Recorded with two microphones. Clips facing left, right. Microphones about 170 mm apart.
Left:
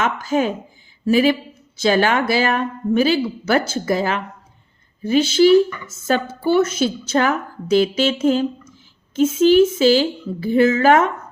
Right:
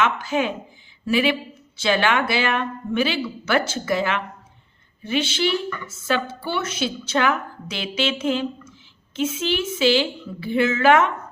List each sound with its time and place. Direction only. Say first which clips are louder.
0.0 s a woman's voice: left 3 dB; 40° left (ahead or behind)